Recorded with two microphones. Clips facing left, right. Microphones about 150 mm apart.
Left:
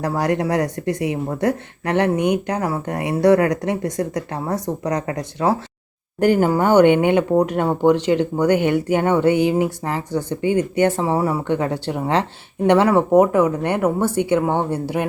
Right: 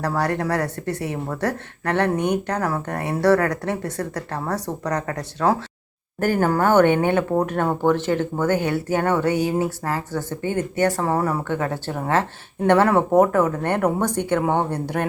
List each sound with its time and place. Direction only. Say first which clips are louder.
0.0 s speech: left 3 dB; 10° left (ahead or behind)